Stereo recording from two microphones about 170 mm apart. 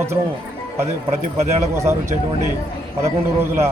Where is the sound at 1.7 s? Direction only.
15° right (ahead or behind).